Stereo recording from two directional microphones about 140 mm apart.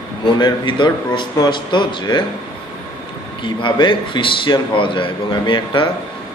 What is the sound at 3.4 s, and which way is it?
Speech, 35° left (ahead or behind).